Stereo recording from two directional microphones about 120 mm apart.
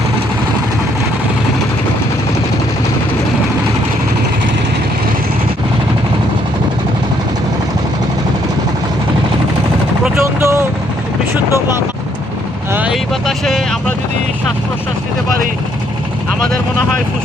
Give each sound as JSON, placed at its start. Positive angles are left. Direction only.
{"t": 10.4, "sound": "vehicle", "side_deg": -25}
{"t": 12.9, "sound": "speech", "side_deg": 0}